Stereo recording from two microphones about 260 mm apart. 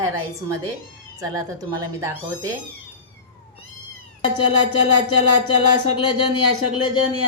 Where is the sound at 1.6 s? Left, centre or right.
Centre.